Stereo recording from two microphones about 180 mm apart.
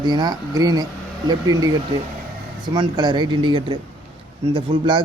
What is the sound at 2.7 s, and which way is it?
A man's voice, 25° right (ahead or behind).